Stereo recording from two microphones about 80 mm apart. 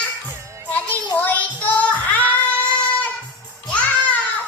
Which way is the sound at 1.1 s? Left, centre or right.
Left.